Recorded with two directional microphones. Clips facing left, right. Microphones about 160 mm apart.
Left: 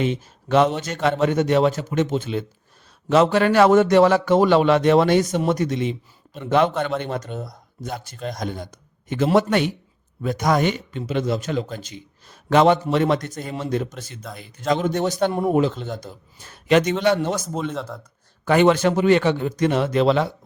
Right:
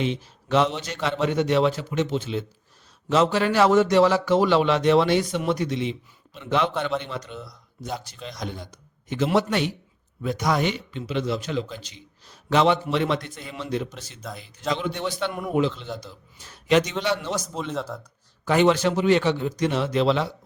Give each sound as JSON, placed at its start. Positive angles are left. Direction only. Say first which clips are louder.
{"t": 0.0, "sound": "a man's voice", "louder": "left 3 dB", "side_deg": 50}
{"t": 14.2, "sound": "speech", "louder": "right 2 dB", "side_deg": 0}
{"t": 14.7, "sound": "a man's voice", "louder": "left 6 dB", "side_deg": 45}
{"t": 17.7, "sound": "speech", "louder": "left 1 dB", "side_deg": 0}
{"t": 18.4, "sound": "a man's voice", "louder": "left 3 dB", "side_deg": 55}